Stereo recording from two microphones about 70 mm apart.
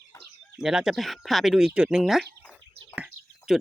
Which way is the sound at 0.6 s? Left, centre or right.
Centre.